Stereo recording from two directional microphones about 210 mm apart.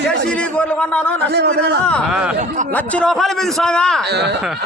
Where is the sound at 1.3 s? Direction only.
50° right (ahead or behind).